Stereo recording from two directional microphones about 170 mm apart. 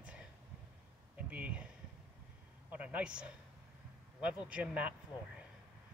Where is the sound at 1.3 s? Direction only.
5° right (ahead or behind).